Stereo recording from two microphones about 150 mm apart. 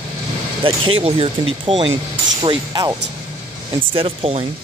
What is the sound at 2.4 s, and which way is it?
Speech, 25° right (ahead or behind).